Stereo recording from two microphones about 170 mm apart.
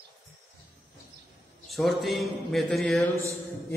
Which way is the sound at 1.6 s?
Centre (ahead or behind).